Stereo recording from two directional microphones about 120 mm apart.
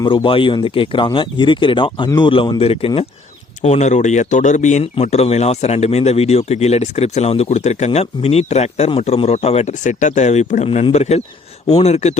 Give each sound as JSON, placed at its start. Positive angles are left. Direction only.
{"t": 0.0, "sound": "speech", "side_deg": 45}
{"t": 3.6, "sound": "speech", "side_deg": 75}
{"t": 4.8, "sound": "speech", "side_deg": 65}